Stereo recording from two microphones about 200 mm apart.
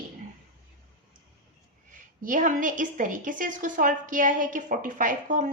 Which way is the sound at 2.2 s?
40° right (ahead or behind).